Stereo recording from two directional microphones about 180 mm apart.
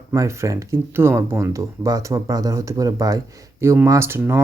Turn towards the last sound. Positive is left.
turn(degrees=-15)  # may be behind; listen again after turning